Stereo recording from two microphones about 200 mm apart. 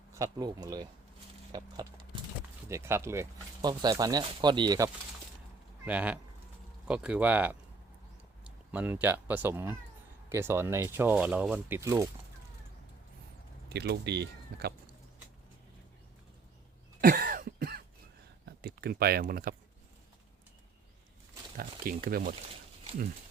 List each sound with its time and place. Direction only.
0.1 s speech: 15° right (ahead or behind)
5.8 s speech: 5° right (ahead or behind)
13.7 s speech: 55° right (ahead or behind)
17.0 s cough: 45° right (ahead or behind)
18.4 s a sound: 50° right (ahead or behind)
21.6 s speech: 45° right (ahead or behind)